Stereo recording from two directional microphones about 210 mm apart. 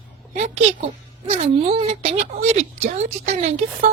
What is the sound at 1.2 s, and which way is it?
Speech, 30° right (ahead or behind).